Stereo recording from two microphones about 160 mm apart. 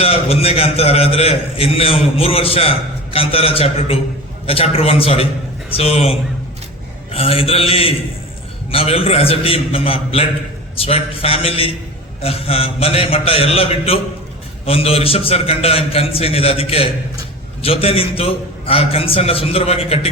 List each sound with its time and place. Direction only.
0.0 s a man's voice: 40° left (ahead or behind)